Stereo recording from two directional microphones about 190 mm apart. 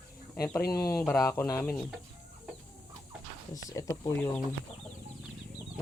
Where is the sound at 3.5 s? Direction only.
15° left (ahead or behind).